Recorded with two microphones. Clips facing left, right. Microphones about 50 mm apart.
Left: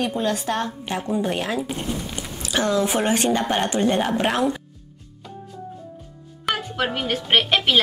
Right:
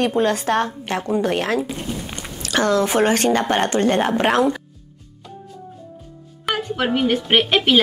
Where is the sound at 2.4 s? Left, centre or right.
Right.